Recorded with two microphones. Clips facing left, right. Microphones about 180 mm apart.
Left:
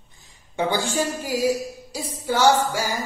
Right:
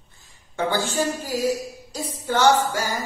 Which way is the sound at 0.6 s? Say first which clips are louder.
Even; 15° left (ahead or behind).